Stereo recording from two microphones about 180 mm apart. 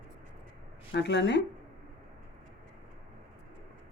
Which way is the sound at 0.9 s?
75° left (ahead or behind).